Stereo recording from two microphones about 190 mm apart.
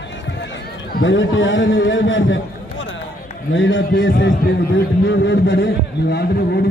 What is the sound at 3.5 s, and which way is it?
A man's voice, 80° left.